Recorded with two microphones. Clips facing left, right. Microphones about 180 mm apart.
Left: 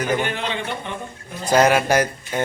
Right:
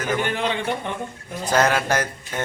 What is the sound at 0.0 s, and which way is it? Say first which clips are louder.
Speech: left 2 dB; 15° left (ahead or behind).